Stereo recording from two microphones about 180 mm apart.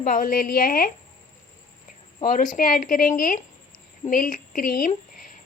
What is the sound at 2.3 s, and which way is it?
A woman's voice, 50° left (ahead or behind).